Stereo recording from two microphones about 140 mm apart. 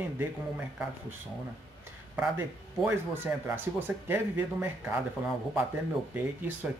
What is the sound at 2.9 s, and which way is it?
Speech, 15° right (ahead or behind).